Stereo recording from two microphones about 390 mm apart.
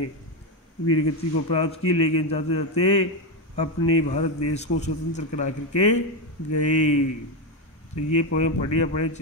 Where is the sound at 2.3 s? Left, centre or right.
Centre.